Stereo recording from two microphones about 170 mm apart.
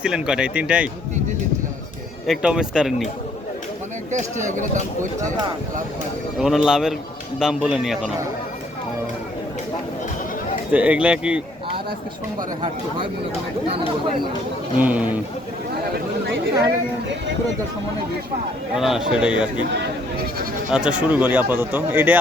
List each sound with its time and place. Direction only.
0.0 s speech: 5° right (ahead or behind)
2.2 s speech: 5° right (ahead or behind)
4.1 s speech: 45° right (ahead or behind)
6.4 s speech: 5° right (ahead or behind)
10.7 s speech: 10° right (ahead or behind)
14.8 s speech: 10° right (ahead or behind)
18.8 s speech: centre (ahead or behind)
20.7 s speech: 5° right (ahead or behind)